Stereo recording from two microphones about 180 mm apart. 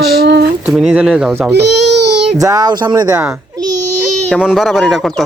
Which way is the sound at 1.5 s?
70° right (ahead or behind).